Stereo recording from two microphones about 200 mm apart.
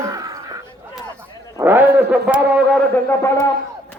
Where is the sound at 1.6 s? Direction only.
10° right (ahead or behind).